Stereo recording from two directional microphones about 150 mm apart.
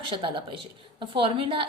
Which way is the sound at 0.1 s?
35° right (ahead or behind).